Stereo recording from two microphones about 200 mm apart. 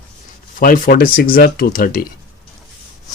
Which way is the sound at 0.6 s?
45° left (ahead or behind).